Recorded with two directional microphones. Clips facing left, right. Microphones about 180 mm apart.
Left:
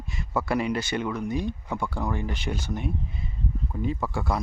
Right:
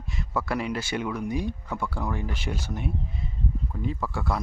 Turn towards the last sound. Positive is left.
turn(degrees=0)  # may be behind; listen again after turning